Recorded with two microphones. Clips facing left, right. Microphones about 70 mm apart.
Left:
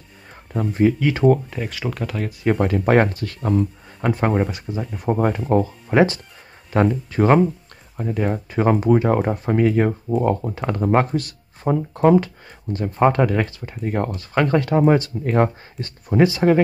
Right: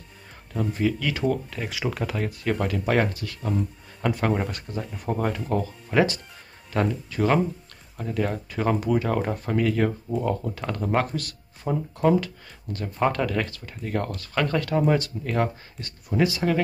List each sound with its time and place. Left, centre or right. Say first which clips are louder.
0.5 s speech: left 7 dB; left
1.7 s speech: right 2 dB; centre
2.8 s speech: left 7 dB; left
4.0 s speech: left 4 dB; left
4.4 s speech: left 7 dB; centre
4.9 s speech: left 7 dB; left
8.0 s speech: left 4 dB; centre
10.0 s speech: left 6 dB; left
11.6 s speech: left 6 dB; left
12.7 s speech: left 7 dB; left